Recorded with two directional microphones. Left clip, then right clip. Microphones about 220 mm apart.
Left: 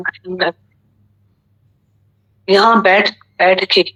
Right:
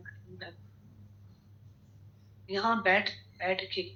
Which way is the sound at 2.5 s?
50° left (ahead or behind).